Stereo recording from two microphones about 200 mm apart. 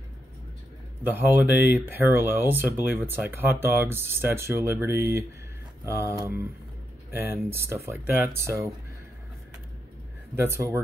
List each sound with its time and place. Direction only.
1.0 s speech: 10° right (ahead or behind)
10.3 s speech: 15° right (ahead or behind)